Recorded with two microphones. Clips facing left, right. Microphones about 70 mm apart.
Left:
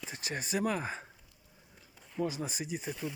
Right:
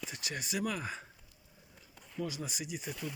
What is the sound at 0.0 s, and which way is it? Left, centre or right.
Speech, left.